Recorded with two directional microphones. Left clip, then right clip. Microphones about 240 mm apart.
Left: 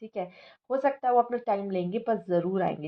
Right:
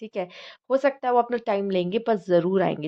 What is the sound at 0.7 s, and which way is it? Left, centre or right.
A woman's voice, right.